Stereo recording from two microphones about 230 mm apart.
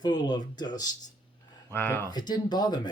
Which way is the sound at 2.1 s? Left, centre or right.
Centre.